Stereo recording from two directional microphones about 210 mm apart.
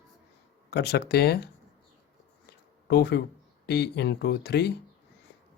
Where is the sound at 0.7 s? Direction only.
50° left (ahead or behind).